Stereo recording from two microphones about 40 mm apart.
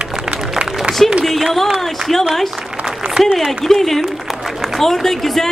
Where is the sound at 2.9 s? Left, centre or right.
Right.